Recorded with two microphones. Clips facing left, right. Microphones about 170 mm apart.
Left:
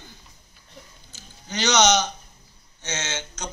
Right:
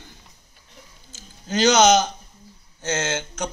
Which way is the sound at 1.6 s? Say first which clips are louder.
Right 4 dB; 50° right (ahead or behind).